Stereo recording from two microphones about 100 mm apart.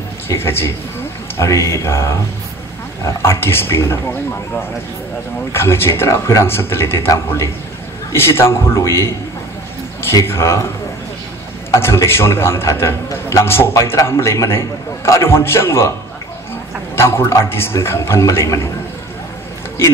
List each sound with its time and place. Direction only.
0.3 s a man's voice: 25° left (ahead or behind)
5.5 s a man's voice: 25° left (ahead or behind)
10.2 s a man's voice: 25° left (ahead or behind)
11.7 s a man's voice: 30° left (ahead or behind)
16.9 s a man's voice: 25° left (ahead or behind)